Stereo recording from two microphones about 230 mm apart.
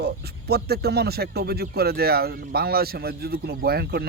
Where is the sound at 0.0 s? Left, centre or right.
Right.